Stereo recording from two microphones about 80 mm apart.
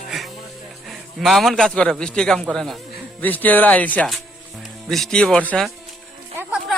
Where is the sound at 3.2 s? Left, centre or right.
Left.